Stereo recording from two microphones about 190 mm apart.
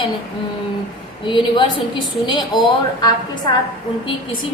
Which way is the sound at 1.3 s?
25° left (ahead or behind).